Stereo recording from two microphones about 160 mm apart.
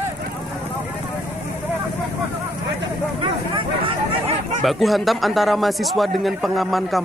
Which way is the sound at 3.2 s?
30° right (ahead or behind).